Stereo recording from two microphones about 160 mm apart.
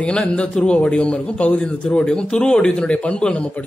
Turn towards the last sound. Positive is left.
turn(degrees=5)  # may be behind; listen again after turning